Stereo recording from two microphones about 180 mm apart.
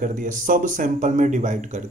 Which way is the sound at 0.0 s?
45° right (ahead or behind).